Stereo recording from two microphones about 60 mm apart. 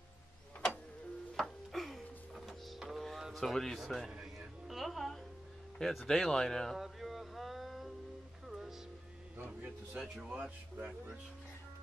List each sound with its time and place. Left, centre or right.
1.3 s music: centre
3.3 s speech: centre
4.2 s music: centre
5.8 s speech: centre
6.8 s a sound: centre
8.5 s music: centre
9.4 s a sound: centre